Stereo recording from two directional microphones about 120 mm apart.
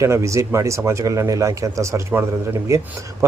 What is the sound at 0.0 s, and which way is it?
Speech, 25° right (ahead or behind).